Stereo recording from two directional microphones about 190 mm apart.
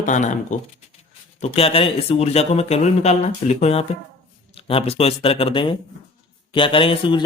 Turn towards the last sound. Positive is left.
turn(degrees=25)  # may be behind; listen again after turning